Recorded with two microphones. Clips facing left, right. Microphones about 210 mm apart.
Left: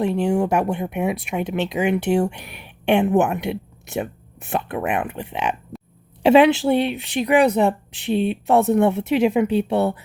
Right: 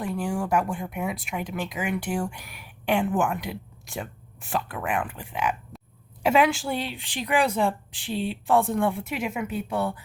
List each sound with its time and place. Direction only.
0.0 s speech: 25° left (ahead or behind)